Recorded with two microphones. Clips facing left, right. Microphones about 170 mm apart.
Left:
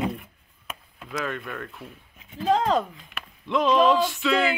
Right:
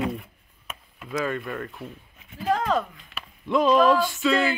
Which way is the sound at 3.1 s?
Centre (ahead or behind).